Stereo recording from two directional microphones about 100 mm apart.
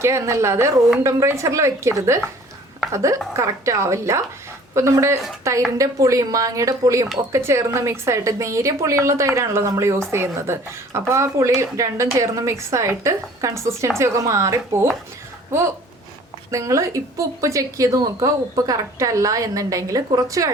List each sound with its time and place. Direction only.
0.0 s a woman's voice: 30° right (ahead or behind)
16.5 s a woman's voice: 30° right (ahead or behind)